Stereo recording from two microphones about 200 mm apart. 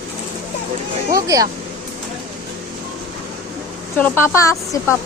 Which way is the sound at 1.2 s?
15° right (ahead or behind).